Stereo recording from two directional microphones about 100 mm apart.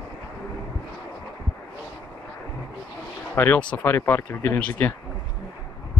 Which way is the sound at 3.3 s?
20° left (ahead or behind).